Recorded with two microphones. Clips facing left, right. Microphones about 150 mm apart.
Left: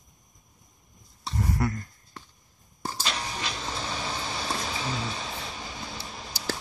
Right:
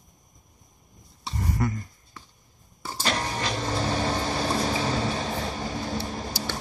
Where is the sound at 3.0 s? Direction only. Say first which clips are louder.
Right 7 dB; 50° right (ahead or behind).